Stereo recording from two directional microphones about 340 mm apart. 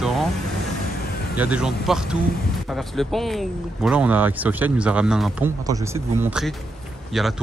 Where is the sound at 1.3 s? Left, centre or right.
Centre.